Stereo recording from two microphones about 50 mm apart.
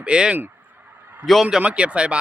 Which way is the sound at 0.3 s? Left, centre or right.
Right.